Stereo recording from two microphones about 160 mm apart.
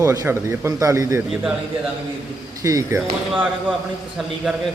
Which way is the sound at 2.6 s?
20° right (ahead or behind).